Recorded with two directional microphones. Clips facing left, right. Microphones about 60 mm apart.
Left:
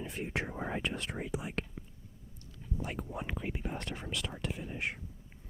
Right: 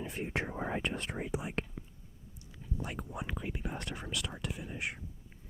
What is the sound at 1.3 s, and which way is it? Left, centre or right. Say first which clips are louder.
Speech: right 1 dB; right.